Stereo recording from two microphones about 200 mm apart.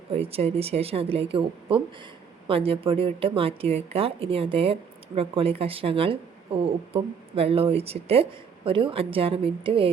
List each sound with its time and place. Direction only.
0.1 s a woman's voice: 30° right (ahead or behind)